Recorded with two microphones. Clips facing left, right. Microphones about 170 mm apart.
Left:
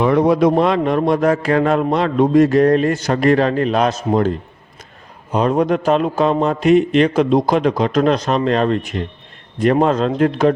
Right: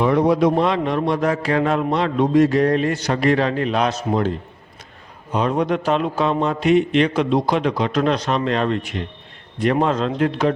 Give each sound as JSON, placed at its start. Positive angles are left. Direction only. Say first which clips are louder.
{"t": 0.0, "sound": "a man's voice", "louder": "left 3 dB", "side_deg": 60}
{"t": 5.3, "sound": "a man's voice", "louder": "left 4 dB", "side_deg": 45}